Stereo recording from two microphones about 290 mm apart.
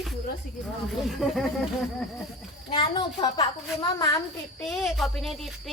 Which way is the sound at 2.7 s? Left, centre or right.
Centre.